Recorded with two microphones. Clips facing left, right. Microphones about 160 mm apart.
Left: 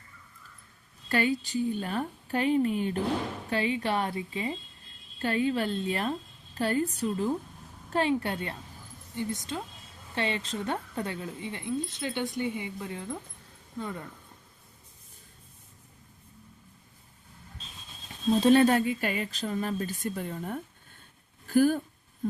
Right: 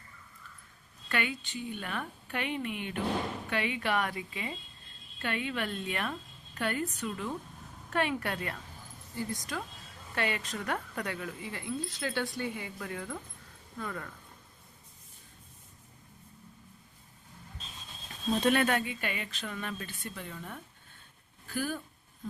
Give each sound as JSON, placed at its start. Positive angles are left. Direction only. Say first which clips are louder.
{"t": 1.0, "sound": "speech", "louder": "left 7 dB", "side_deg": 35}
{"t": 18.3, "sound": "speech", "louder": "left 7 dB", "side_deg": 30}